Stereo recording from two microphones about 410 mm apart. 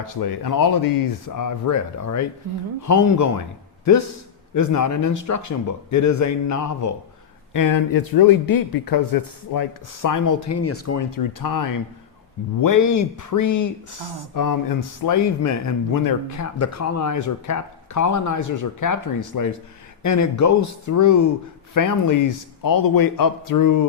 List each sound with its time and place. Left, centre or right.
0.0 s speech: left
4.5 s a man's voice: left